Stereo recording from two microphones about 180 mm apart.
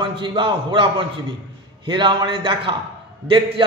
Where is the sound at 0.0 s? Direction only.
25° right (ahead or behind).